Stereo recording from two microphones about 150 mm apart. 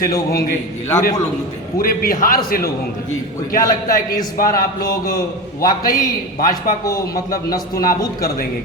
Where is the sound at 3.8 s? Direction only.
70° left (ahead or behind).